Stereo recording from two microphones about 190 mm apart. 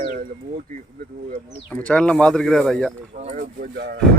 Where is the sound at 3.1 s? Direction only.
40° right (ahead or behind).